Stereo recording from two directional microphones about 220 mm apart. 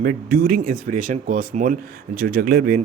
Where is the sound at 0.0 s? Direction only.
45° right (ahead or behind).